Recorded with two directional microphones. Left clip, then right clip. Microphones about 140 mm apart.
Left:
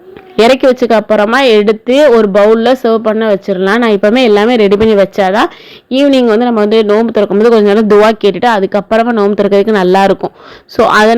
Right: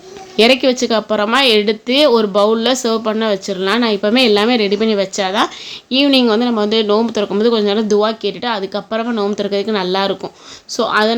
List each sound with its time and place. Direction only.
0.3 s speech: 45° left (ahead or behind)
5.9 s speech: 35° left (ahead or behind); by 11.2 s 55° left (ahead or behind)